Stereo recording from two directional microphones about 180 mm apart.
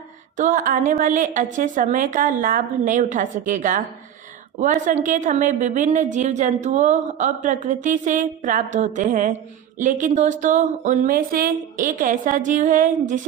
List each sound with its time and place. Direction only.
0.3 s a woman's voice: 45° right (ahead or behind)